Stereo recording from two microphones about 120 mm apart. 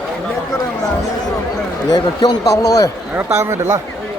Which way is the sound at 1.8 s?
35° left (ahead or behind).